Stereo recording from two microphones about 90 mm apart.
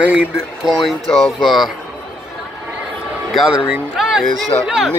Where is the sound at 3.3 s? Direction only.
Centre (ahead or behind).